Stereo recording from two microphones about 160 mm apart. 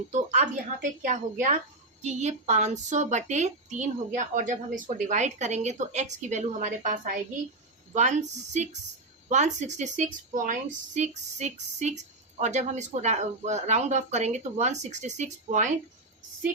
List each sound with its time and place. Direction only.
0.1 s a woman's voice: 45° right (ahead or behind)
9.3 s a woman's voice: 45° right (ahead or behind)